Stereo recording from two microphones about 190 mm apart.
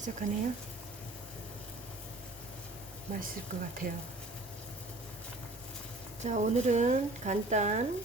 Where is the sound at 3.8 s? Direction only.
45° right (ahead or behind).